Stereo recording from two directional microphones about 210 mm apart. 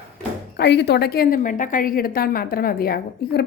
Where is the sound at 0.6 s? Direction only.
55° left (ahead or behind).